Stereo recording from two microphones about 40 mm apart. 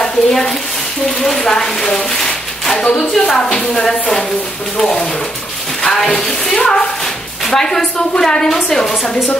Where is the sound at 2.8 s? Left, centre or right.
Left.